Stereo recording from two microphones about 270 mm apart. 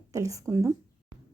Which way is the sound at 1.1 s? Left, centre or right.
Right.